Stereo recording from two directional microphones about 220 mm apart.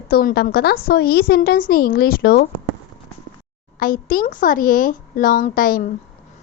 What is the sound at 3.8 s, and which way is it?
A woman's voice, 40° left (ahead or behind).